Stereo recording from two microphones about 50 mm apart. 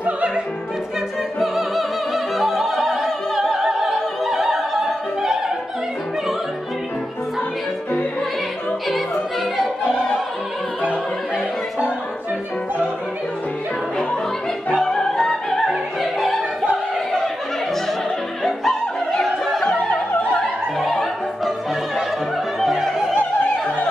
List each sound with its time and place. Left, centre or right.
2.3 s opera: centre
14.8 s music: centre
15.6 s music: centre
18.4 s music: centre
20.8 s music: centre
22.6 s opera: centre
23.1 s opera: left